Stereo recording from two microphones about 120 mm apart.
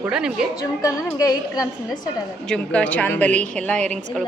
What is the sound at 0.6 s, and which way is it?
A woman's voice, 30° left (ahead or behind).